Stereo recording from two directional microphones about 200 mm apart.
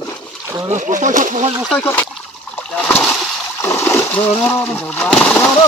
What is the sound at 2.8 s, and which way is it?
Splash, 5° left (ahead or behind).